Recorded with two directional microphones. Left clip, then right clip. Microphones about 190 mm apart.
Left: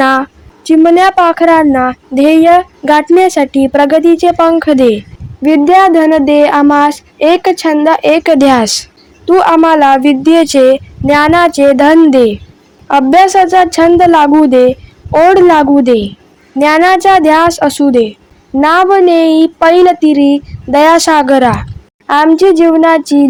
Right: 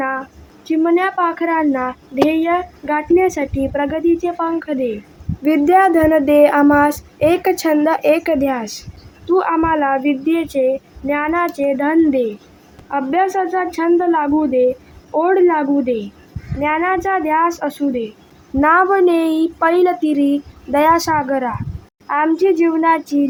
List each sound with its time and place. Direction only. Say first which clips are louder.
0.0 s a woman's voice: left 12 dB; 60° left (ahead or behind)
5.4 s a woman's voice: left 7 dB; 30° left (ahead or behind); by 18.0 s 50° left (ahead or behind)
18.6 s a woman's voice: left 6 dB; 40° left (ahead or behind)